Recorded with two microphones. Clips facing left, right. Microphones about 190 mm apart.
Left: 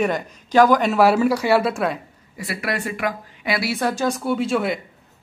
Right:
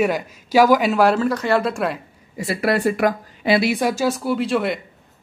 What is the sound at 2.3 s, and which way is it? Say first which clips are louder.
Speech: right 6 dB; 25° right (ahead or behind).